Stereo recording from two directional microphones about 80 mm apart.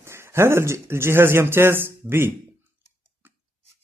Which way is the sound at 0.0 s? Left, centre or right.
Right.